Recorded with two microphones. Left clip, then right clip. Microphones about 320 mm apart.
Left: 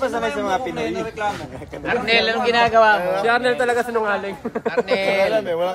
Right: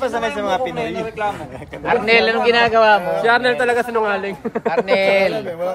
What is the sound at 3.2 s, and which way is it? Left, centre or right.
Speech, centre.